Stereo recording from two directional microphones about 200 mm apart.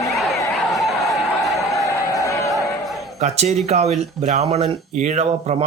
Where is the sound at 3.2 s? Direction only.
35° right (ahead or behind).